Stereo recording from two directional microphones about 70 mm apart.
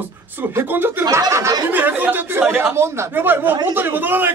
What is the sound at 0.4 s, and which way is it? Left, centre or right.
A man's voice, right.